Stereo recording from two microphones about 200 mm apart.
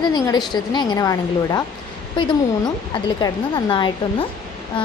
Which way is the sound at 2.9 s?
20° left (ahead or behind).